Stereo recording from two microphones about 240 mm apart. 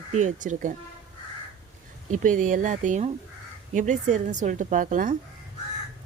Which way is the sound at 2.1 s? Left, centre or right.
Right.